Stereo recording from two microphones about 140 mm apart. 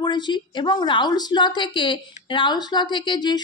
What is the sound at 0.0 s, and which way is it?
A woman's voice, 30° left (ahead or behind).